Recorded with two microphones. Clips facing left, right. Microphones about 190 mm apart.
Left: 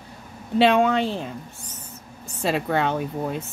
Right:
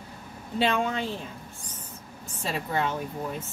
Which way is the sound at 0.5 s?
75° left (ahead or behind).